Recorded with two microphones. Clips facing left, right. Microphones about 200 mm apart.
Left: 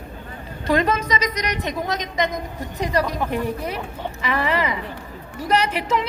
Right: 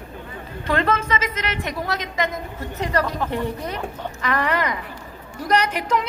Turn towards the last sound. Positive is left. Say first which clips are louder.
# even
turn(degrees=5)  # may be behind; listen again after turning